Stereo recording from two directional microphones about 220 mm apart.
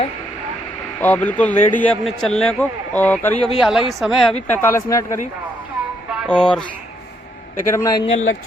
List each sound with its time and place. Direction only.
0.9 s a man's voice: 5° left (ahead or behind)
6.2 s speech: 5° left (ahead or behind)
7.7 s a man's voice: 15° left (ahead or behind)
8.0 s speech: 30° left (ahead or behind)